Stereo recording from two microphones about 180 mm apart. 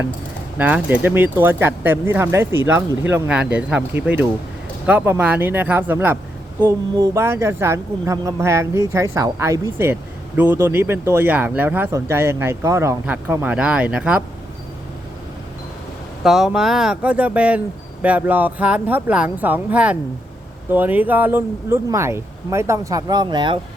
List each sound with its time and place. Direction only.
0.6 s speech: 10° right (ahead or behind)
16.2 s speech: centre (ahead or behind); by 23.6 s 25° right (ahead or behind)